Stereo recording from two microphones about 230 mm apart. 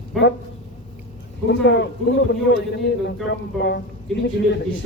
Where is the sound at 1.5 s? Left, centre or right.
Left.